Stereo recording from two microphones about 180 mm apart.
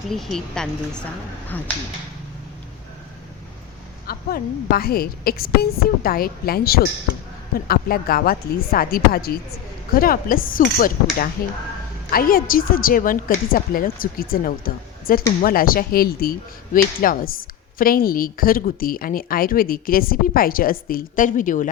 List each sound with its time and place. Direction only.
0.1 s a woman's voice: centre (ahead or behind)
4.0 s a woman's voice: 55° left (ahead or behind)